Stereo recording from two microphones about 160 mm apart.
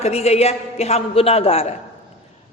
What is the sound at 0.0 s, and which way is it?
A woman's voice, 40° left (ahead or behind).